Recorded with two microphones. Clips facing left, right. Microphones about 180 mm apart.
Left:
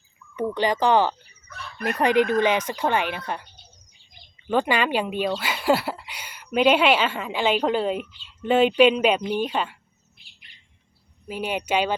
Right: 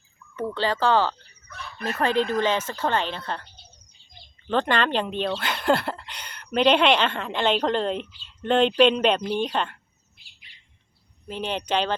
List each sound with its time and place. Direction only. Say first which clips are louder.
0.3 s speech: left 3 dB; 15° left (ahead or behind)
1.5 s chicken: even; centre (ahead or behind)
1.8 s speech: left 3 dB; 15° left (ahead or behind)
4.4 s speech: left 1 dB; 10° left (ahead or behind)
11.3 s speech: left 1 dB; 10° left (ahead or behind)